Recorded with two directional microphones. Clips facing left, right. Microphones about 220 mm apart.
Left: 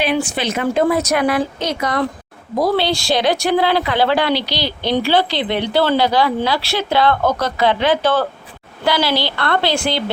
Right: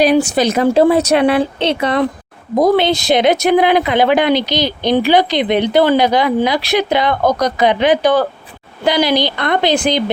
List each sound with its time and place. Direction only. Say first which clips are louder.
0.0 s speech: right 7 dB; 40° right (ahead or behind); by 10.0 s 20° right (ahead or behind)